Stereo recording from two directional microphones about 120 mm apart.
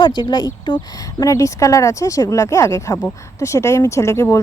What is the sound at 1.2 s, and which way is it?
Speech, 25° left (ahead or behind).